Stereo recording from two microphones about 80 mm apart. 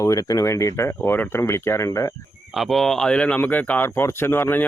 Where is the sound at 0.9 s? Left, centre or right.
Left.